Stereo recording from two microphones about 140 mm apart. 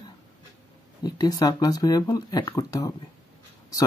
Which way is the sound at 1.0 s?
30° left (ahead or behind).